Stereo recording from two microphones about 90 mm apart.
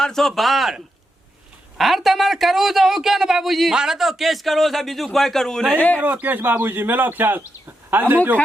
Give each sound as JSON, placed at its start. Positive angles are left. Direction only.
{"t": 0.0, "sound": "speech", "side_deg": 5}
{"t": 1.8, "sound": "speech", "side_deg": 0}
{"t": 6.0, "sound": "speech", "side_deg": -20}